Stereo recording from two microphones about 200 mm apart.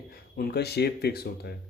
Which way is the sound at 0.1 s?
50° left (ahead or behind).